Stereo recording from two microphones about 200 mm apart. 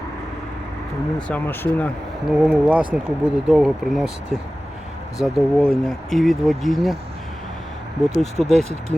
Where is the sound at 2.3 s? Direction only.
5° right (ahead or behind).